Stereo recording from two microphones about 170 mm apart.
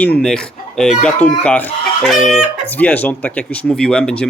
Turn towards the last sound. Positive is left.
turn(degrees=5)  # may be behind; listen again after turning